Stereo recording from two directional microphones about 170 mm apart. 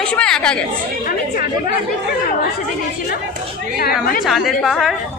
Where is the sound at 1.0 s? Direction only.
55° left (ahead or behind).